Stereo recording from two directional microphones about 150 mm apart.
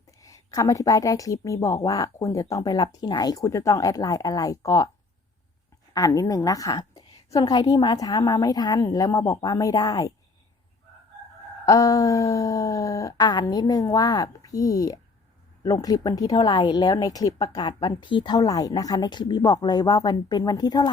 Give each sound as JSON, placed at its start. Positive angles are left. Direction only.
{"t": 0.2, "sound": "speech", "side_deg": 25}
{"t": 5.9, "sound": "speech", "side_deg": 25}
{"t": 11.6, "sound": "speech", "side_deg": 20}